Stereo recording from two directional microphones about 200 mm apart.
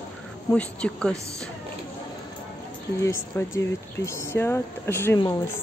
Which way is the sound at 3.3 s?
15° left (ahead or behind).